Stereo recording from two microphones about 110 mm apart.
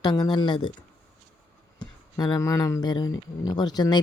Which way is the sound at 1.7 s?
35° left (ahead or behind).